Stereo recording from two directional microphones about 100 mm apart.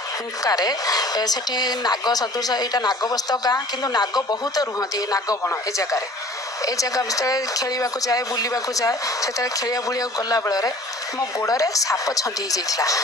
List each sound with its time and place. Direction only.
0.4 s speech: 40° left (ahead or behind)